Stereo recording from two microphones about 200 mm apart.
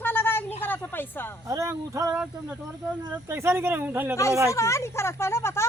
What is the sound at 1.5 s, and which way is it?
Speech, 15° right (ahead or behind).